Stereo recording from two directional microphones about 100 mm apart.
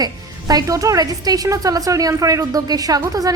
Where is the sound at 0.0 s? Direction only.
40° right (ahead or behind).